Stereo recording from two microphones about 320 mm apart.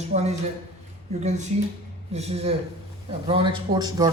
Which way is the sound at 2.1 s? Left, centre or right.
Centre.